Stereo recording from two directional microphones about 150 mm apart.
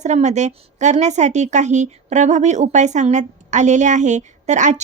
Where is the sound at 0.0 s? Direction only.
50° right (ahead or behind).